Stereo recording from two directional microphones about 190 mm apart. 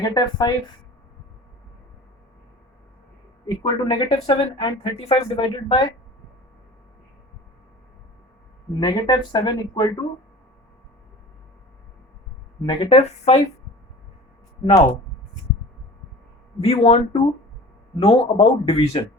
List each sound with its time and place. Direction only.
0.0 s speech: 20° left (ahead or behind)
3.4 s speech: 20° left (ahead or behind)
8.8 s speech: 25° left (ahead or behind)
12.6 s a man's voice: 30° left (ahead or behind)
14.6 s speech: 20° left (ahead or behind)
16.6 s a man's voice: 30° left (ahead or behind)